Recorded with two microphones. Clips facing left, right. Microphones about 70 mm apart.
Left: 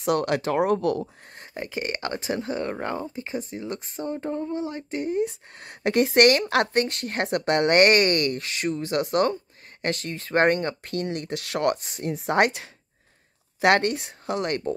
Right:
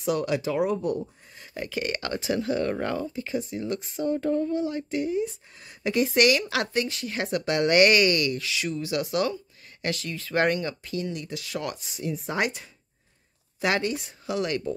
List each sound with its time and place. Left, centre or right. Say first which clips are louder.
0.0 s speech: left 2 dB; left
0.7 s speech: left 3 dB; left
1.5 s speech: even; left
5.1 s speech: left 2 dB; left